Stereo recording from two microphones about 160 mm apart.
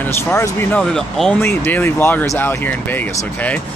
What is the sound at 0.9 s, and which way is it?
Speech, 5° left (ahead or behind).